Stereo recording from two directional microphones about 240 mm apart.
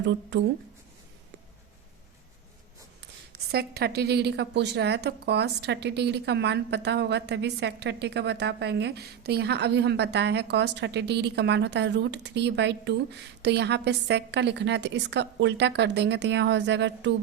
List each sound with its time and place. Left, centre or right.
0.0 s a woman's voice: right
3.5 s a woman's voice: right